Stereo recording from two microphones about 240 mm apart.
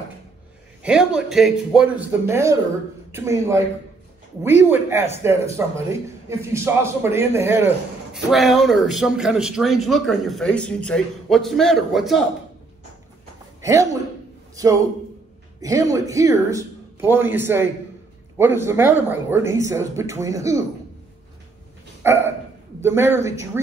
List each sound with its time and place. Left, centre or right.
0.8 s a man's voice: centre
13.6 s a sound: centre
14.5 s a man's voice: centre
22.0 s hiccup: centre
22.8 s speech: centre